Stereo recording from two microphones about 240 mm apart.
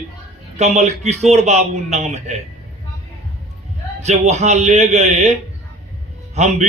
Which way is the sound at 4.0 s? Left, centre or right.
Right.